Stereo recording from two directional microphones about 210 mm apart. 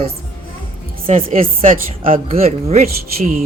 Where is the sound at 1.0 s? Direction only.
40° right (ahead or behind).